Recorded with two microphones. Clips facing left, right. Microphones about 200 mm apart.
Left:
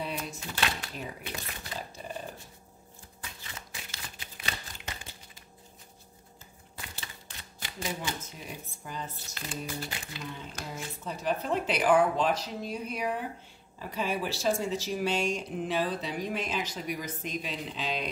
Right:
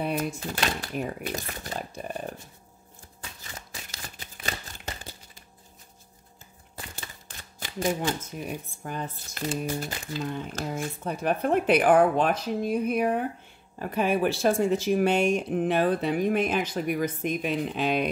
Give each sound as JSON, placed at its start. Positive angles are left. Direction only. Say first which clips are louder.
{"t": 0.0, "sound": "speech", "louder": "right 8 dB", "side_deg": -50}
{"t": 1.8, "sound": "speech", "louder": "right 4 dB", "side_deg": -55}
{"t": 3.9, "sound": "a sound", "louder": "right 2 dB", "side_deg": -40}
{"t": 7.6, "sound": "speech", "louder": "right 9 dB", "side_deg": -45}
{"t": 10.8, "sound": "speech", "louder": "right 7 dB", "side_deg": -55}